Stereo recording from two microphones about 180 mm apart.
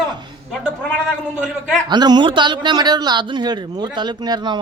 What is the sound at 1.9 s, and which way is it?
A man's voice, 25° right (ahead or behind).